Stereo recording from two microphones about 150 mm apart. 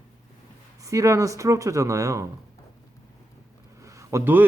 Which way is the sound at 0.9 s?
20° right (ahead or behind).